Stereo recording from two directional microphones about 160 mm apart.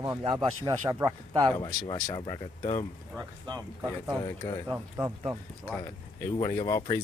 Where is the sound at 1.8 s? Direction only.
30° left (ahead or behind).